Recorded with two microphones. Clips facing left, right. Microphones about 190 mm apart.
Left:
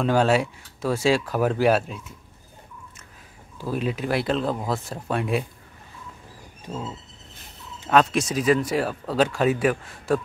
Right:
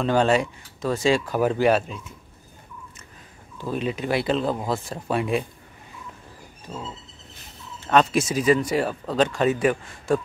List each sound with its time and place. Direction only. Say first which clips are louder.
0.0 s speech: even; 5° left (ahead or behind)
3.5 s speech: even; 5° left (ahead or behind)
7.9 s speech: even; centre (ahead or behind)